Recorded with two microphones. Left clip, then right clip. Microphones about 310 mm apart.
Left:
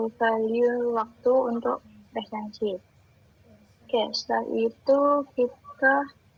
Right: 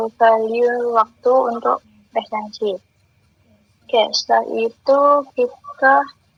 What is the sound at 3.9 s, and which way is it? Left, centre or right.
Speech, right.